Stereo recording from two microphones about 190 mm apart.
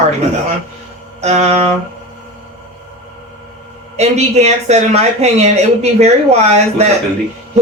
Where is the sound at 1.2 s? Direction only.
35° right (ahead or behind).